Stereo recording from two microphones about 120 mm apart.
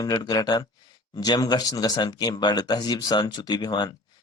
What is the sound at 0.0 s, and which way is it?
Speech, 35° left (ahead or behind).